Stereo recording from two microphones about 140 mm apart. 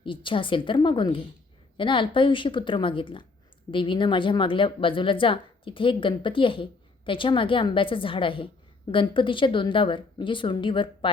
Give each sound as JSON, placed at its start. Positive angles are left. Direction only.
{"t": 0.0, "sound": "a woman's voice", "side_deg": 35}